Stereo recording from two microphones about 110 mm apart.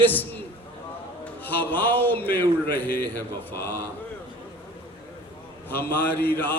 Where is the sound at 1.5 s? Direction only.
15° left (ahead or behind).